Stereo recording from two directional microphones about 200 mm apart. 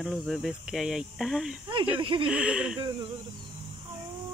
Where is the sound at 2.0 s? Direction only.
25° right (ahead or behind).